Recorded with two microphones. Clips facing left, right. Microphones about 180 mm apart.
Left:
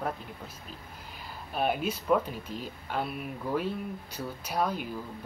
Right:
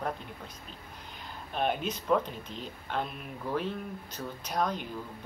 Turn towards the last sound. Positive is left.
turn(degrees=5)  # may be behind; listen again after turning